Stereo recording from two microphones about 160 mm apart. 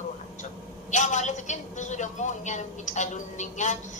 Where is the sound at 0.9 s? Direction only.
50° left (ahead or behind).